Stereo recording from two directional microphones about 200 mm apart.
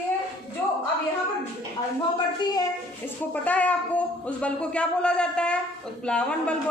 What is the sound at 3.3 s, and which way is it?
Speech, 5° left (ahead or behind).